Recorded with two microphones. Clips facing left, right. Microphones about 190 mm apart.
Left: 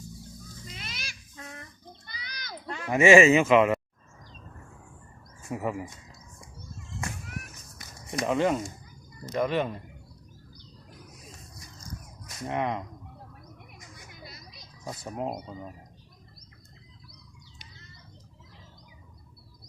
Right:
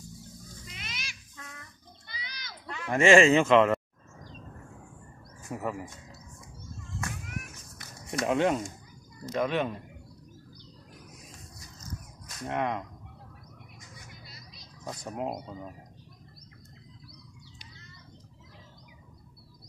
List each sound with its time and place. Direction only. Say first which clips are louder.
0.7 s a sound: left 1 dB; 35° left (ahead or behind)
2.9 s speech: left 2 dB; 10° left (ahead or behind)
5.5 s speech: left 3 dB; 5° left (ahead or behind)
8.2 s speech: even; centre (ahead or behind)
12.3 s speech: left 1 dB; 10° left (ahead or behind)
14.2 s vehicle: left 4 dB; 50° left (ahead or behind)
14.8 s speech: left 1 dB; 5° left (ahead or behind)